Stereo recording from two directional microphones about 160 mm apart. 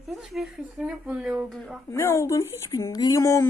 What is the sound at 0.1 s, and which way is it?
Speech, centre (ahead or behind).